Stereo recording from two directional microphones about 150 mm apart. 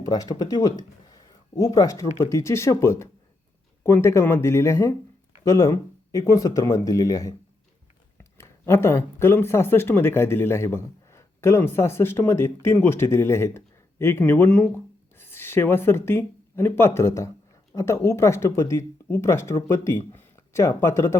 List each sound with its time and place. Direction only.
0.0 s speech: 25° left (ahead or behind)